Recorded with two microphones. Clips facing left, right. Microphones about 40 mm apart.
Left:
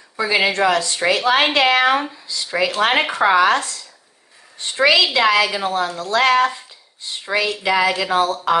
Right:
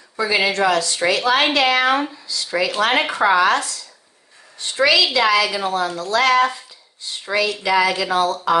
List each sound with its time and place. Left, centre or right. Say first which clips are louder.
0.2 s a woman's voice: left 1 dB; left
2.3 s speech: even; left
2.9 s a woman's voice: even; left